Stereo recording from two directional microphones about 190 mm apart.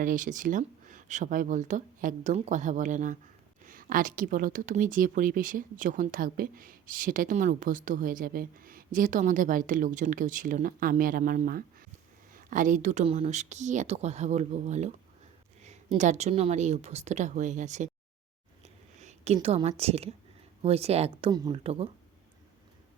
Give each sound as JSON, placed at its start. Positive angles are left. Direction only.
{"t": 0.0, "sound": "speech", "side_deg": -45}
{"t": 18.9, "sound": "a woman's voice", "side_deg": -35}
{"t": 21.2, "sound": "speech", "side_deg": -20}